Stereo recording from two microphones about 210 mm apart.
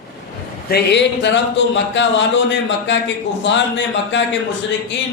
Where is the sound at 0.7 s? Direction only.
55° left (ahead or behind).